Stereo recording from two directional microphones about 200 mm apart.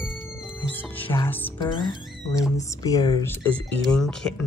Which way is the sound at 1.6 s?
20° left (ahead or behind).